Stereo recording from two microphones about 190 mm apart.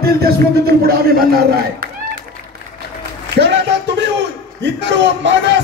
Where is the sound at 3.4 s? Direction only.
65° right (ahead or behind).